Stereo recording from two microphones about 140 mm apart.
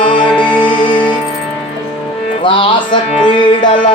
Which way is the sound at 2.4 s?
35° left (ahead or behind).